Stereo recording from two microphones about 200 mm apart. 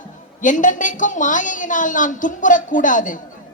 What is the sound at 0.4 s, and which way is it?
A woman's voice, 40° left (ahead or behind).